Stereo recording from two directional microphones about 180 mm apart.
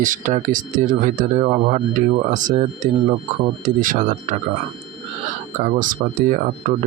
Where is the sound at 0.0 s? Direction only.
45° right (ahead or behind).